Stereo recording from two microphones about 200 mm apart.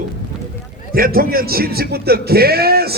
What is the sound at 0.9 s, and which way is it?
Speech, 45° right (ahead or behind).